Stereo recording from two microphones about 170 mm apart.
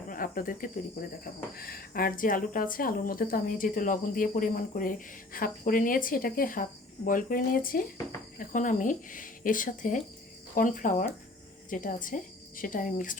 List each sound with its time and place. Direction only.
0.1 s a woman's voice: 55° left (ahead or behind)